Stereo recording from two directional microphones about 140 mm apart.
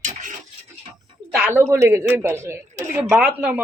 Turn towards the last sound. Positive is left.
turn(degrees=-5)  # may be behind; listen again after turning